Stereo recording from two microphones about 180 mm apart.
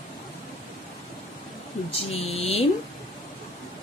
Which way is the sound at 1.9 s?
35° left (ahead or behind).